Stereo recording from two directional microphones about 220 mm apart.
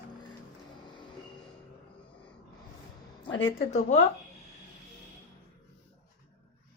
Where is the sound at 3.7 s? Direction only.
30° left (ahead or behind).